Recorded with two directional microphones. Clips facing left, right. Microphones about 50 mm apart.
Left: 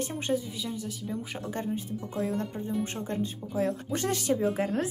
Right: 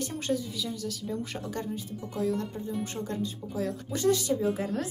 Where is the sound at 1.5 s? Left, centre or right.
Left.